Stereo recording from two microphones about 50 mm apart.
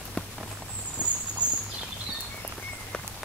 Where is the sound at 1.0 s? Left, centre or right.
Left.